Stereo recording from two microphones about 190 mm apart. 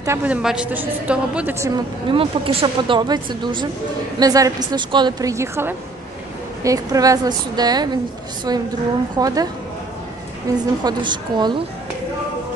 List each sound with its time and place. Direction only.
0.0 s a woman's voice: 10° right (ahead or behind)
2.0 s a woman's voice: 25° right (ahead or behind)
10.8 s a woman's voice: 25° right (ahead or behind)